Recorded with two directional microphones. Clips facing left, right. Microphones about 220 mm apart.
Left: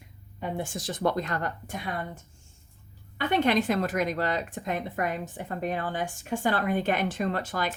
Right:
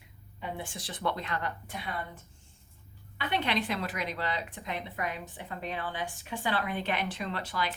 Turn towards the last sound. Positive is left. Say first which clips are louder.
# left 5 dB
turn(degrees=45)  # may be behind; listen again after turning